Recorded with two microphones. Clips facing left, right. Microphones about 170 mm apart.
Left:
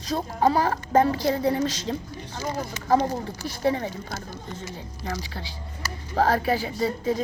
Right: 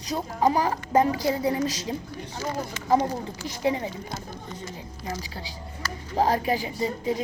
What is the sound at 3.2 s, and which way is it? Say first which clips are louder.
Speech: left 1 dB; 15° right (ahead or behind).